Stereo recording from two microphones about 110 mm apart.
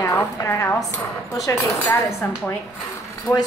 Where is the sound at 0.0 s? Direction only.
25° left (ahead or behind).